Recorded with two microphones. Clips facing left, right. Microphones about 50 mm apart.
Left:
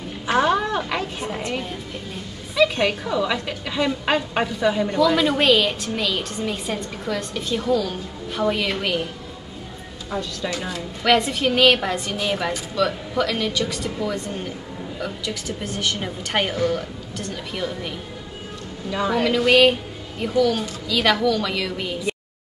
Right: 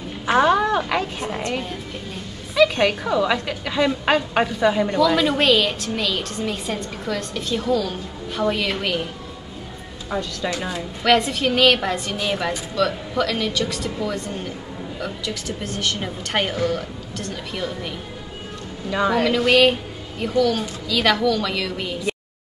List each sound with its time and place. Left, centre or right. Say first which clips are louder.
0.3 s a sound: right 3 dB; right
1.2 s music: right 1 dB; centre
2.5 s a sound: right 2 dB; right
3.1 s a woman's voice: right 3 dB; right
4.0 s a woman's voice: right 2 dB; right
4.4 s a woman's voice: right 2 dB; right
4.8 s a woman's voice: even; centre
10.1 s a woman's voice: right 2 dB; right
11.1 s a woman's voice: right 1 dB; centre
18.9 s a woman's voice: right 3 dB; right
19.1 s a woman's voice: left 1 dB; centre